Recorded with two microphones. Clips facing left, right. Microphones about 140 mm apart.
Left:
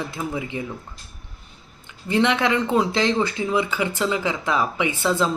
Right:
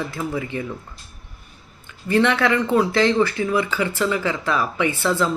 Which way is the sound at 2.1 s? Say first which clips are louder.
Right 2 dB; 15° left (ahead or behind).